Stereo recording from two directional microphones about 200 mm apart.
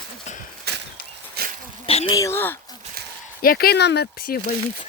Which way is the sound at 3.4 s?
45° left (ahead or behind).